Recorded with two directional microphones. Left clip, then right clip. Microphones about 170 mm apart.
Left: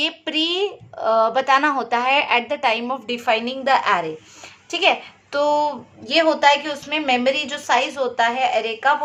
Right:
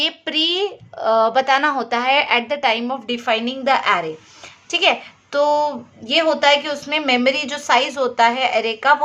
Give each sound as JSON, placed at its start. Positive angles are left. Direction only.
{"t": 0.0, "sound": "a woman's voice", "side_deg": -15}